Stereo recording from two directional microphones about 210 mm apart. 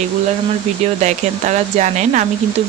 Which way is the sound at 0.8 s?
35° right (ahead or behind).